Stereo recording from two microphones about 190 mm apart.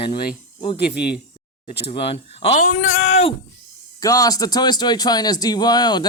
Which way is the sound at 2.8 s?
90° left.